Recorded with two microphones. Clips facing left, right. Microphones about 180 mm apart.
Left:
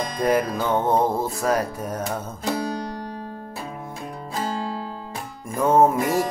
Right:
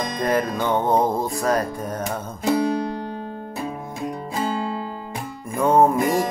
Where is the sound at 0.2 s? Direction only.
10° left (ahead or behind).